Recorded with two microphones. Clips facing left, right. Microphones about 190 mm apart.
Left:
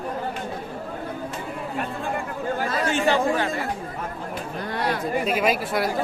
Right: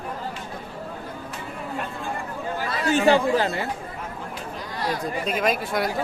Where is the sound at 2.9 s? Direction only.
35° right (ahead or behind).